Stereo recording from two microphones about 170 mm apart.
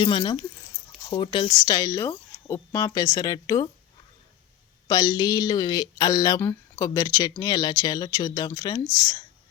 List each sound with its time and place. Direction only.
0.0 s speech: 30° left (ahead or behind)
4.9 s speech: 25° left (ahead or behind)